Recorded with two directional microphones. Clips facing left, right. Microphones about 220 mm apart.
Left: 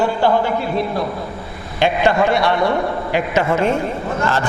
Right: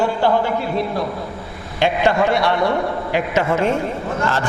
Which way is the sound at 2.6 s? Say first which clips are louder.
Left 1 dB; 30° left (ahead or behind).